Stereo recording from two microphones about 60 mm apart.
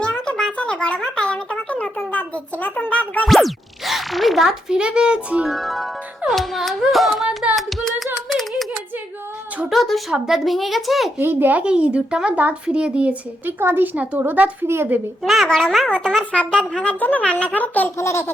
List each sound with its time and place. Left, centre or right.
0.0 s a sound: centre
0.5 s a sound: centre
2.1 s a child's voice: left
3.2 s a child's voice: centre
5.5 s speech: centre
7.5 s music: centre
9.6 s speech: centre
11.2 s a child's voice: right
11.6 s speech: centre
13.6 s a child's voice: right
13.9 s a child's voice: right
15.2 s a child's voice: centre; by 17.9 s left
17.9 s a sound: left